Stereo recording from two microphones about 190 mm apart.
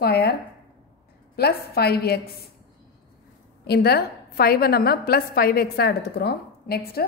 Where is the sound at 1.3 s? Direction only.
55° left (ahead or behind).